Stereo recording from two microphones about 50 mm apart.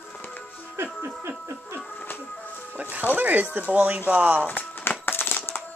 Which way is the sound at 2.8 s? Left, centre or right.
Right.